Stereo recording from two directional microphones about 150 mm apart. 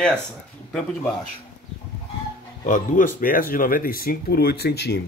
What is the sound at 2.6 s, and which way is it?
Speech, 60° left (ahead or behind).